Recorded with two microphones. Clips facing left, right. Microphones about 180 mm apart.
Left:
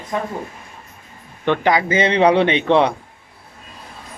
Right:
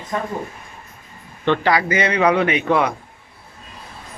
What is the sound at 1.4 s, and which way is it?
A man's voice, 15° left (ahead or behind).